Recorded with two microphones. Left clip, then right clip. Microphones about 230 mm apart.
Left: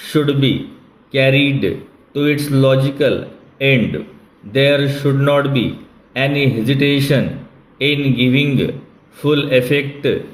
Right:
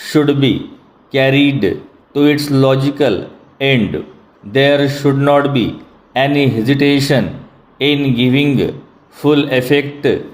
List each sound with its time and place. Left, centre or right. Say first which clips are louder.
0.0 s a man's voice: right 3 dB; centre